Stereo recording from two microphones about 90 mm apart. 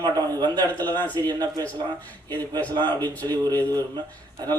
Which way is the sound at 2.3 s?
20° left (ahead or behind).